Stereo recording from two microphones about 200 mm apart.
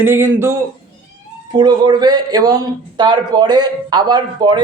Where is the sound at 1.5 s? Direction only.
20° right (ahead or behind).